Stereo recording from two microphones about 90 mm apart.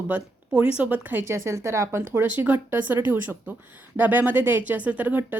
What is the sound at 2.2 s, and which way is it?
A woman's voice, 15° right (ahead or behind).